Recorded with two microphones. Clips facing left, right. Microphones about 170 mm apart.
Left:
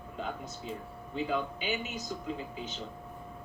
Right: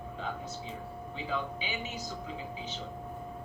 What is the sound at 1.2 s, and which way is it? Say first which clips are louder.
Speech: left 4 dB; 50° left (ahead or behind).